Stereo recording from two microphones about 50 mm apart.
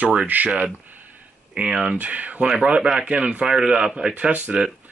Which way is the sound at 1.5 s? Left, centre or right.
Centre.